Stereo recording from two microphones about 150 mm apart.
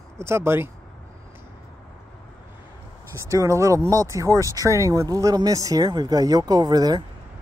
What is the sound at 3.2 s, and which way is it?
Speech, 20° right (ahead or behind).